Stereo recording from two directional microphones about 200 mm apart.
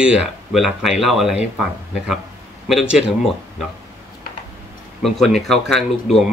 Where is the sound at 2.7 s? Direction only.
Centre (ahead or behind).